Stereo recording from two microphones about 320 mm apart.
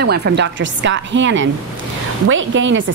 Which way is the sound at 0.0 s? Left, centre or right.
Right.